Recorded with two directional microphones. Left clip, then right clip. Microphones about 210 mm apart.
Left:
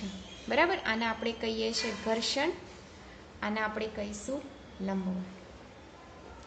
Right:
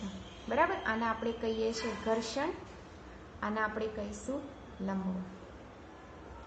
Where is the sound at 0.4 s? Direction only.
50° left (ahead or behind).